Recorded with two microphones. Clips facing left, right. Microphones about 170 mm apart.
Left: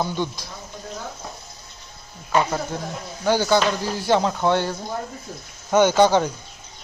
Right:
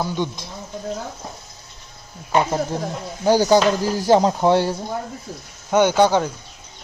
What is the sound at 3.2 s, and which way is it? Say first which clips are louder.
Speech: right 4 dB; 40° right (ahead or behind).